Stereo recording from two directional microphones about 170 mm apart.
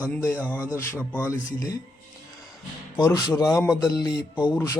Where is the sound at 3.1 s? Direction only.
20° left (ahead or behind).